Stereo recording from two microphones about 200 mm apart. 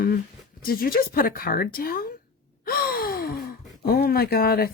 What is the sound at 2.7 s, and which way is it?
Gasp, 45° left (ahead or behind).